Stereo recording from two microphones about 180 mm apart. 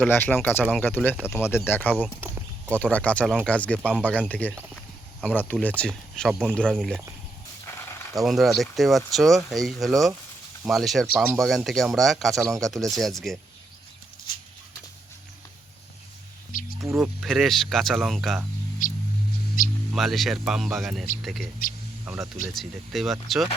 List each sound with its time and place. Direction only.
0.1 s speech: 10° left (ahead or behind)
7.8 s a sound: 15° left (ahead or behind)
8.1 s speech: centre (ahead or behind)
11.0 s speech: 10° right (ahead or behind)
11.3 s speech: centre (ahead or behind)
16.5 s music: 50° left (ahead or behind)
16.9 s speech: centre (ahead or behind)
18.8 s a sound: 50° left (ahead or behind)
19.6 s speech: 50° left (ahead or behind)
19.9 s speech: centre (ahead or behind)
21.6 s speech: 50° left (ahead or behind)
22.0 s speech: 10° right (ahead or behind)